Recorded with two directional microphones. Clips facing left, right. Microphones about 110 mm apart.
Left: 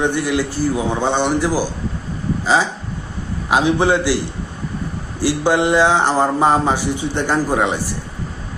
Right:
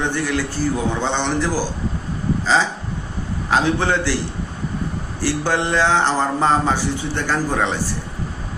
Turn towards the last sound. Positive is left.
turn(degrees=15)  # may be behind; listen again after turning